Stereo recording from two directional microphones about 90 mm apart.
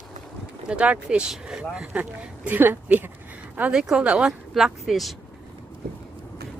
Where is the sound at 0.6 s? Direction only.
15° right (ahead or behind).